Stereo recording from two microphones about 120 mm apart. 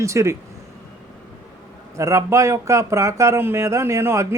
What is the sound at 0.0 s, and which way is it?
Speech, 25° right (ahead or behind).